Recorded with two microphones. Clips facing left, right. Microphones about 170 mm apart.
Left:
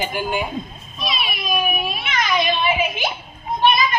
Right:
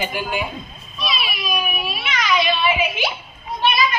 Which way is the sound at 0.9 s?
50° left (ahead or behind).